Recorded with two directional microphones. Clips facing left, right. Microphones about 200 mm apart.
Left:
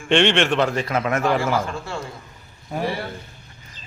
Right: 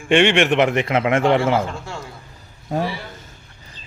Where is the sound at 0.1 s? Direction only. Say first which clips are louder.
Right 3 dB; 10° right (ahead or behind).